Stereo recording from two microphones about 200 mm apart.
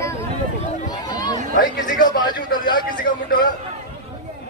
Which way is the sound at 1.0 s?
20° left (ahead or behind).